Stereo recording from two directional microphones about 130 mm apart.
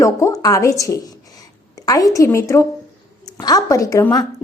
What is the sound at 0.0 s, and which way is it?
A woman's voice, 25° left (ahead or behind).